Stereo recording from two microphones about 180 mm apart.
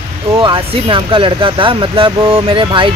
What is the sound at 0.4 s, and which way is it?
Speech, 25° right (ahead or behind).